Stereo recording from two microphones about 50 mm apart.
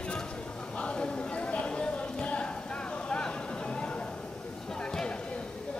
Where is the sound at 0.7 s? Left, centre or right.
Centre.